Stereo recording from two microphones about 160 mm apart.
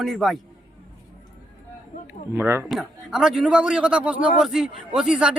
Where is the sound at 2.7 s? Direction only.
5° right (ahead or behind).